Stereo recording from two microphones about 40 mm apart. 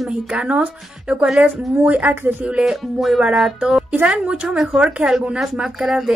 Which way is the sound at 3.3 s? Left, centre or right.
Centre.